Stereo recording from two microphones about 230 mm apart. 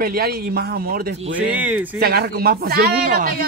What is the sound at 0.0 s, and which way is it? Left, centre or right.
Speech, right.